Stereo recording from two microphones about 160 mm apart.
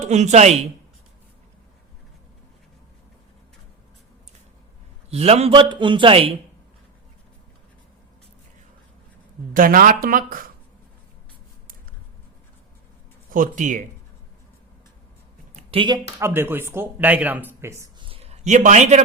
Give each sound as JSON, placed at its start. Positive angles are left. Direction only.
{"t": 0.0, "sound": "speech", "side_deg": -45}
{"t": 5.1, "sound": "a man's voice", "side_deg": -40}
{"t": 9.5, "sound": "speech", "side_deg": -60}
{"t": 13.3, "sound": "speech", "side_deg": -55}
{"t": 15.5, "sound": "a sound", "side_deg": -35}
{"t": 16.1, "sound": "speech", "side_deg": -15}
{"t": 18.0, "sound": "a sound", "side_deg": -35}